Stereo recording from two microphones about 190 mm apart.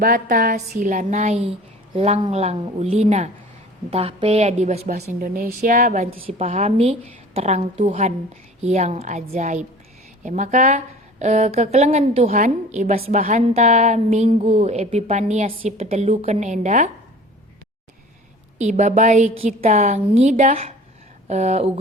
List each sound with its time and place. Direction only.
0.0 s a woman's voice: 50° right (ahead or behind)
4.9 s a woman's voice: 45° right (ahead or behind)
6.1 s a woman's voice: 30° right (ahead or behind)
18.6 s a woman's voice: 40° right (ahead or behind)